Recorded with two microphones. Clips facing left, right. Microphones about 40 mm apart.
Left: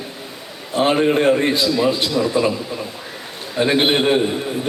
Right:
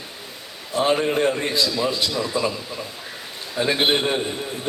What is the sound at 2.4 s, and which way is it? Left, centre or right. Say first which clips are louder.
Speech: left 5 dB; left.